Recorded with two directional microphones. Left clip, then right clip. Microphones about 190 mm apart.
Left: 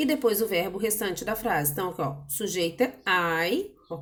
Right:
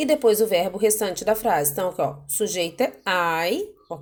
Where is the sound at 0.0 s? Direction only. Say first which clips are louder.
Right 6 dB; 25° right (ahead or behind).